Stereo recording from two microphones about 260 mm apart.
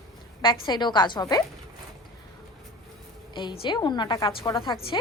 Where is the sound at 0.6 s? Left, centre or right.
Centre.